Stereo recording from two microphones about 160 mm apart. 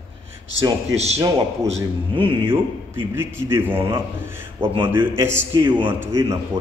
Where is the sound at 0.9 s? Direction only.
40° right (ahead or behind).